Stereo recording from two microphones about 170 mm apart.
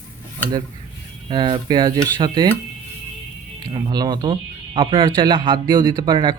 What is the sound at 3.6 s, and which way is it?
A man's voice, 25° right (ahead or behind).